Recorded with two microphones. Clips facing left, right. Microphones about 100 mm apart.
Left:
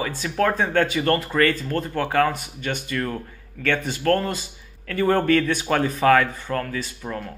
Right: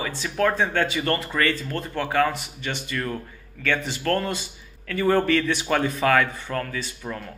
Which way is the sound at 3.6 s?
50° left (ahead or behind).